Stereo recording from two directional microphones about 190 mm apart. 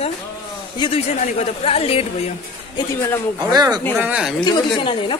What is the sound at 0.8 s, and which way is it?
A woman's voice, 30° left (ahead or behind).